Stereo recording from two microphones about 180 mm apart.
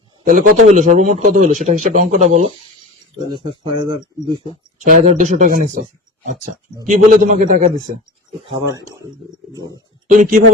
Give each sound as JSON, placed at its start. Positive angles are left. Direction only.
{"t": 0.3, "sound": "a man's voice", "side_deg": -50}
{"t": 3.2, "sound": "speech", "side_deg": -25}
{"t": 4.9, "sound": "a man's voice", "side_deg": -45}
{"t": 6.8, "sound": "a man's voice", "side_deg": -45}
{"t": 8.5, "sound": "speech", "side_deg": -15}